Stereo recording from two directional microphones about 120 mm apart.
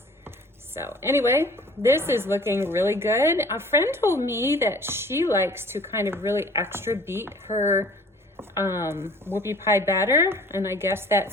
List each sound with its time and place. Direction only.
0.3 s a woman's voice: 20° right (ahead or behind)
7.4 s speech: 70° left (ahead or behind)
8.4 s a woman's voice: 20° right (ahead or behind)